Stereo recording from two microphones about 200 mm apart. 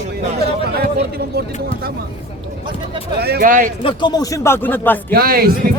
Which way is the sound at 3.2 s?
50° right (ahead or behind).